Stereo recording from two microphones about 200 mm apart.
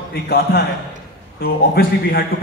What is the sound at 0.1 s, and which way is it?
A man's voice, 50° left (ahead or behind).